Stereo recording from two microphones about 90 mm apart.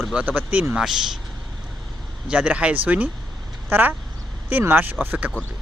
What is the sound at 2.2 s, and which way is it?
Speech, 10° right (ahead or behind).